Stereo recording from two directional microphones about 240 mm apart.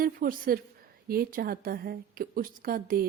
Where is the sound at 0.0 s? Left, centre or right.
Right.